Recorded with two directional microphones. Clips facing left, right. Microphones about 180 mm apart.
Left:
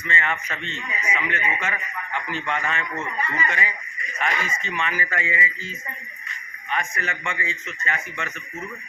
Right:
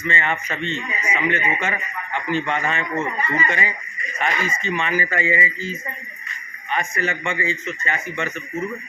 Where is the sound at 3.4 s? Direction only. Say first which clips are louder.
Right 3 dB; centre (ahead or behind).